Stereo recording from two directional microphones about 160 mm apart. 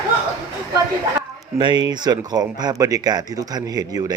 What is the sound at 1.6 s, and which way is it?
A man's voice, 25° right (ahead or behind).